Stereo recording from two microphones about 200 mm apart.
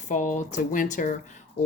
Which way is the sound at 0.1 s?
35° left (ahead or behind).